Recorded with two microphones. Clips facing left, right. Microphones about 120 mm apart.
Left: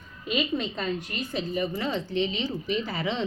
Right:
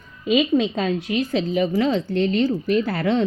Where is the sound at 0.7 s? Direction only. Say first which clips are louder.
Right 9 dB; 90° right.